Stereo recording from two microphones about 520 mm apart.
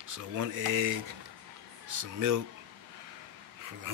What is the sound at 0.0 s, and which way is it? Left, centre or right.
Speech, right.